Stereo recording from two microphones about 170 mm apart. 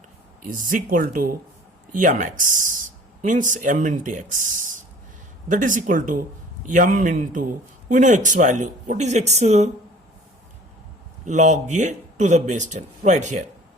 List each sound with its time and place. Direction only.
0.4 s speech: 50° right (ahead or behind)
11.3 s speech: 45° right (ahead or behind)